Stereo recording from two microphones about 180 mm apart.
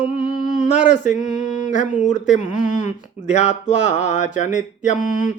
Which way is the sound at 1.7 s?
40° left (ahead or behind).